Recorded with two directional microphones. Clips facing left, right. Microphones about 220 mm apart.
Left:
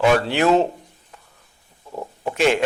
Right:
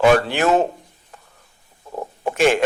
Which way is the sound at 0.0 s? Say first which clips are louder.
Right 2 dB; 50° right (ahead or behind).